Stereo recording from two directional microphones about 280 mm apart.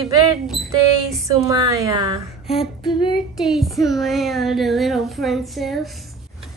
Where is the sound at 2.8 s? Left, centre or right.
Centre.